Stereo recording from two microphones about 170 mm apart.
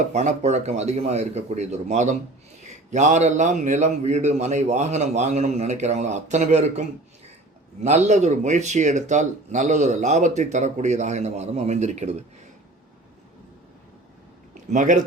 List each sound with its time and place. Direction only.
0.1 s speech: 40° right (ahead or behind)
14.5 s speech: 50° right (ahead or behind)